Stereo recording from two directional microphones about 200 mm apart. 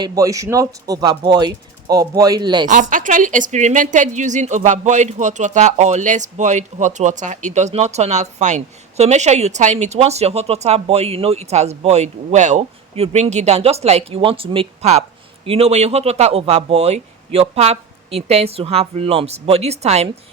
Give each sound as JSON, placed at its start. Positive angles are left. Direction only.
{"t": 0.0, "sound": "speech", "side_deg": -15}
{"t": 2.6, "sound": "a woman's voice", "side_deg": -40}